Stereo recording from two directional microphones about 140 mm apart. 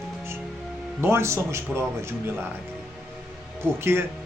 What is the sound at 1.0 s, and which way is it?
Speech, 15° right (ahead or behind).